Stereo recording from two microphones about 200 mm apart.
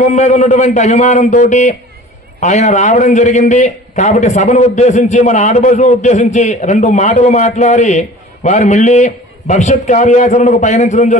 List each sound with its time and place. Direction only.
0.0 s a man's voice: 35° left (ahead or behind)